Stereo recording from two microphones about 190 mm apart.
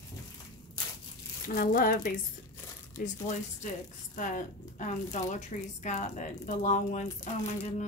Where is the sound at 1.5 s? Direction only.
45° left (ahead or behind).